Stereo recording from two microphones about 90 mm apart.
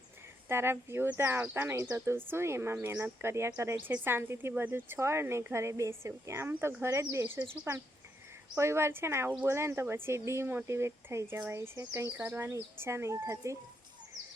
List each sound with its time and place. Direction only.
0.4 s speech: 25° right (ahead or behind)